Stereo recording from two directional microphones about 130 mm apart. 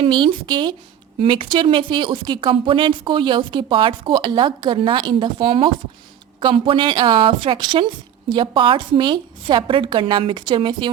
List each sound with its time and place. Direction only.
0.0 s a woman's voice: 40° right (ahead or behind)